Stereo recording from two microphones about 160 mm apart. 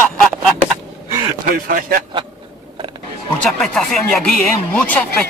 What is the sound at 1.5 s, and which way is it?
Speech, 60° right (ahead or behind).